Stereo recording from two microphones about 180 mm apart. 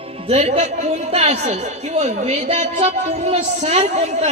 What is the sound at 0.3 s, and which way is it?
A man's voice, 35° right (ahead or behind).